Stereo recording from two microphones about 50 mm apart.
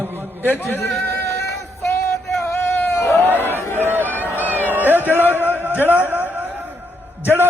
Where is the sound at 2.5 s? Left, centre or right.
Left.